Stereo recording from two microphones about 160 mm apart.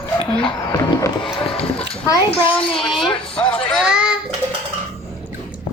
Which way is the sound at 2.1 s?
35° left (ahead or behind).